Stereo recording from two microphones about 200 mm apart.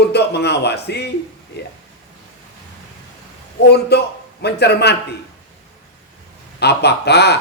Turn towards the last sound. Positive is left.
turn(degrees=55)  # may be behind; listen again after turning